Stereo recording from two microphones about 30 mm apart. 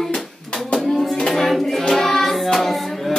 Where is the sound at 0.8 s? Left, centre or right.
Centre.